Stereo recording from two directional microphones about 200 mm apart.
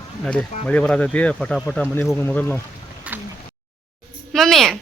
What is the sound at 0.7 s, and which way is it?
Speech, 5° left (ahead or behind).